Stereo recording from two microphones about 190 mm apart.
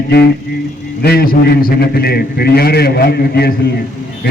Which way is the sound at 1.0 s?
50° left (ahead or behind).